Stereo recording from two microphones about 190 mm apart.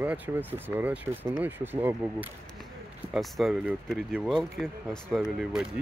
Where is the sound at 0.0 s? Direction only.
10° right (ahead or behind).